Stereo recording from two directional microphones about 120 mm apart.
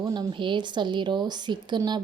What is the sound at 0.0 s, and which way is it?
Speech, 35° right (ahead or behind).